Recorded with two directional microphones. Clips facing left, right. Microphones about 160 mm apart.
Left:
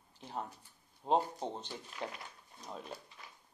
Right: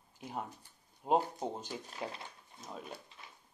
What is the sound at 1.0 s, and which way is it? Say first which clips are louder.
Speech: right 1 dB; 10° right (ahead or behind).